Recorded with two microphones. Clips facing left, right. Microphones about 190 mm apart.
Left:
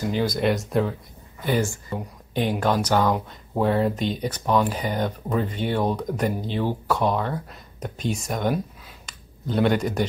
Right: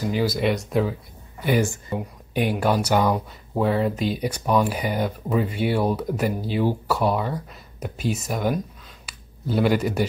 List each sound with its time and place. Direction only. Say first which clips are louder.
0.0 s speech: even; 5° right (ahead or behind)
1.4 s speech: right 2 dB; 15° right (ahead or behind)
3.5 s speech: even; centre (ahead or behind)